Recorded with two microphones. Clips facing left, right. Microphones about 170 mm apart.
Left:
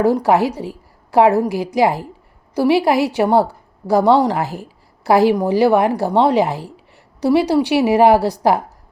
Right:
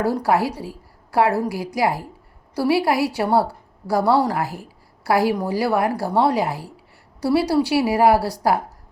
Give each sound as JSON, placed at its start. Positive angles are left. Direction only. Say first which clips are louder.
{"t": 0.0, "sound": "a woman's voice", "louder": "left 5 dB", "side_deg": 20}